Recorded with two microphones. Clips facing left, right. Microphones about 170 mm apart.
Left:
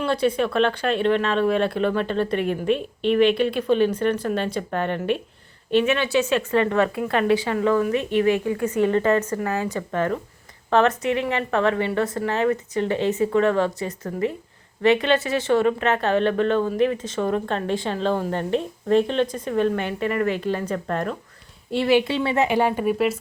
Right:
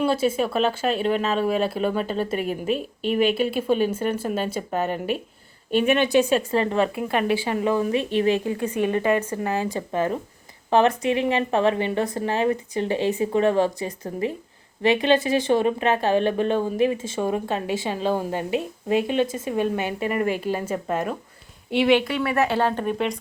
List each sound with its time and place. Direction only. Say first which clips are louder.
0.0 s speech: even; 5° right (ahead or behind)
6.3 s speech: left 1 dB; 30° right (ahead or behind)
6.8 s speech: left 2 dB; 20° right (ahead or behind)
8.7 s speech: left 2 dB; 15° right (ahead or behind); by 21.9 s centre (ahead or behind)
22.0 s speech: left 1 dB; 25° left (ahead or behind)
22.4 s speech: left 2 dB; 15° left (ahead or behind)